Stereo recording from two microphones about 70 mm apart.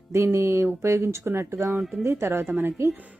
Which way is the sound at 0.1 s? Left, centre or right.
Right.